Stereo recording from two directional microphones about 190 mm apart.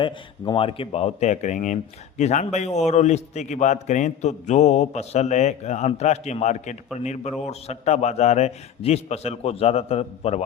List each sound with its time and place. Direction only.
0.0 s speech: 25° left (ahead or behind)